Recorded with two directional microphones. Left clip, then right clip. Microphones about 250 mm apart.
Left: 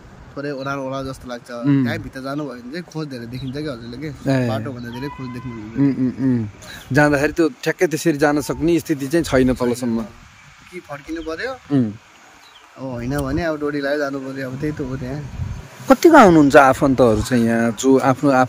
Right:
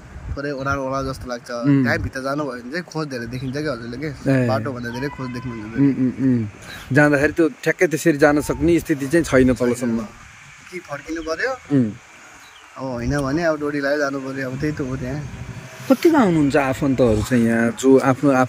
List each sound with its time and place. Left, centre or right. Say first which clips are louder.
0.4 s a man's voice: right 2 dB; centre
5.0 s a man's voice: right 2 dB; centre
12.8 s a man's voice: right 1 dB; centre
15.9 s speech: left 7 dB; centre